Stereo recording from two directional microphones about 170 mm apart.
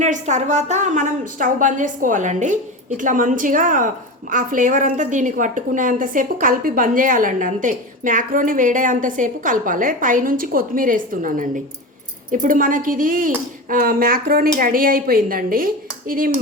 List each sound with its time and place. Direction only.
0.0 s a woman's voice: 45° right (ahead or behind)